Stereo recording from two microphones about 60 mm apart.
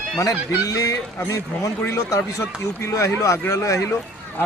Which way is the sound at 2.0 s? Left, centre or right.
Left.